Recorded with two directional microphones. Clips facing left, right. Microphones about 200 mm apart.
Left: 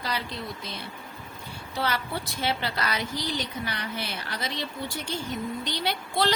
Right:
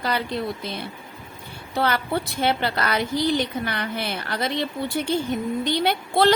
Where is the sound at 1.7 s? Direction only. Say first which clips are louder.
Right 7 dB; 55° right (ahead or behind).